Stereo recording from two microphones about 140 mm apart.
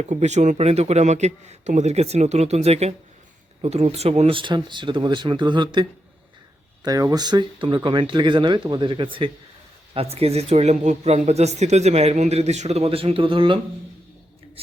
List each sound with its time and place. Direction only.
0.0 s speech: 55° right (ahead or behind); by 13.6 s 35° right (ahead or behind)